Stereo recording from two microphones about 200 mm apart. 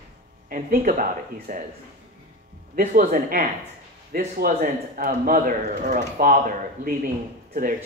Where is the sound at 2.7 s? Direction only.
40° right (ahead or behind).